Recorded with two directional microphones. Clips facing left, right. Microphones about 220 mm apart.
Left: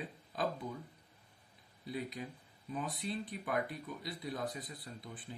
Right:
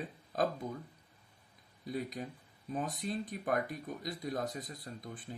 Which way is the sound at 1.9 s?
45° right (ahead or behind).